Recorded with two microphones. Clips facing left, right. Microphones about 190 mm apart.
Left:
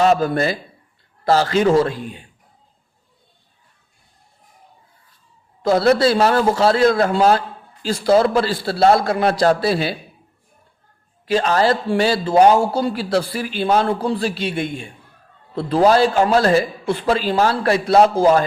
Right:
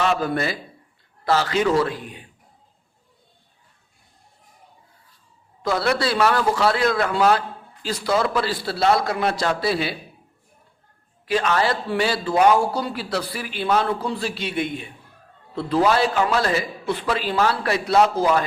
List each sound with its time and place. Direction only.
0.0 s a man's voice: 40° left (ahead or behind)
5.6 s a man's voice: 40° left (ahead or behind)
8.8 s a man's voice: 50° left (ahead or behind)
9.3 s a man's voice: 35° left (ahead or behind)
11.3 s a man's voice: 30° left (ahead or behind)
15.5 s a man's voice: 35° left (ahead or behind)
17.1 s a man's voice: 30° left (ahead or behind)